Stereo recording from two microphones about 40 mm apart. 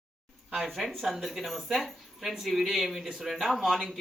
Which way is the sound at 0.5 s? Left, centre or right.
Centre.